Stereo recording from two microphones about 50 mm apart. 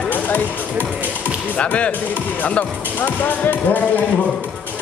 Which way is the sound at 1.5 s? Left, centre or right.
Left.